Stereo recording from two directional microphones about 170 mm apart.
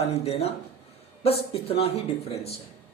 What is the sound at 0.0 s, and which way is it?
Speech, 35° left (ahead or behind).